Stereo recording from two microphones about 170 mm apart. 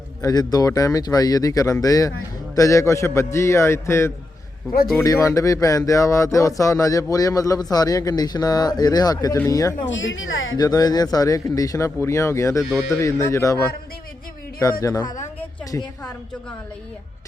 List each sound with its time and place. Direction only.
0.2 s a man's voice: 20° left (ahead or behind)
9.9 s a woman's voice: 90° left
10.6 s a man's voice: 20° left (ahead or behind)